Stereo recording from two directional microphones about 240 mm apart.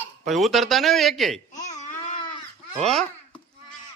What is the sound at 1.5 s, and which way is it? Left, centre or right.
Baby cry, left.